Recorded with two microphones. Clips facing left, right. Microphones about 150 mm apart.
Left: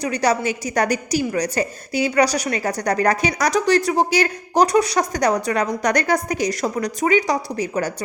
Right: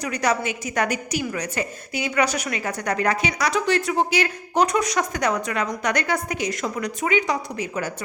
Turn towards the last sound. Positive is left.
turn(degrees=40)  # may be behind; listen again after turning